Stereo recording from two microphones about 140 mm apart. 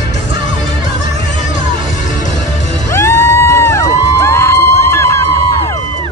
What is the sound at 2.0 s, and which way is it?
Music, 60° left (ahead or behind).